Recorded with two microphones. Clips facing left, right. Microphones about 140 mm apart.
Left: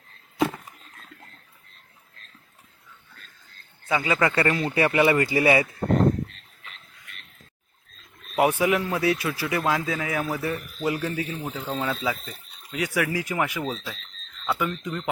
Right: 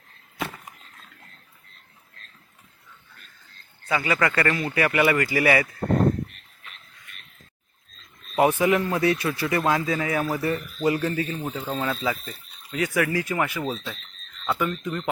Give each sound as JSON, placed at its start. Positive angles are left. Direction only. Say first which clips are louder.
{"t": 3.8, "sound": "speech", "louder": "left 1 dB", "side_deg": 20}
{"t": 8.4, "sound": "a man's voice", "louder": "right 1 dB", "side_deg": 10}